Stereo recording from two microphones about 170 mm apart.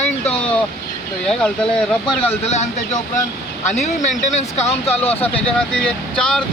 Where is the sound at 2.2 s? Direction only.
40° left (ahead or behind).